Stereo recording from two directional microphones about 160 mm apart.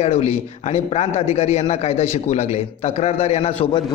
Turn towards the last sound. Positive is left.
turn(degrees=40)  # may be behind; listen again after turning